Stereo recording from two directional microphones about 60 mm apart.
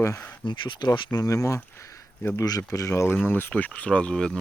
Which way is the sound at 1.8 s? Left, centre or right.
Left.